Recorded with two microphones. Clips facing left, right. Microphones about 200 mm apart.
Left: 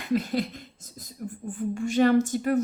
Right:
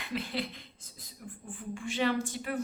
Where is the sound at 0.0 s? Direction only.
45° left (ahead or behind).